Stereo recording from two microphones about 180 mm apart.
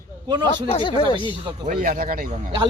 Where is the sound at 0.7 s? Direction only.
30° left (ahead or behind).